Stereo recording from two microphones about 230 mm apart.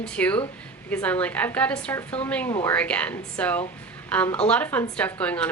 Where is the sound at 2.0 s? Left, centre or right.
Left.